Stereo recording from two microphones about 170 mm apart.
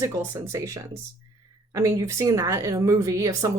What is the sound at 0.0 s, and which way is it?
A woman's voice, 20° right (ahead or behind).